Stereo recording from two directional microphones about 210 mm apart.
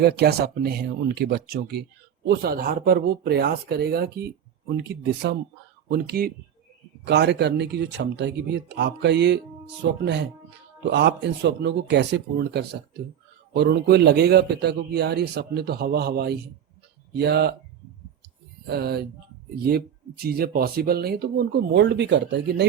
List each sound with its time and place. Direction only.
0.0 s a man's voice: 50° right (ahead or behind)
10.8 s a man's voice: 55° right (ahead or behind)
18.7 s a man's voice: 50° right (ahead or behind)
20.2 s a man's voice: 45° right (ahead or behind)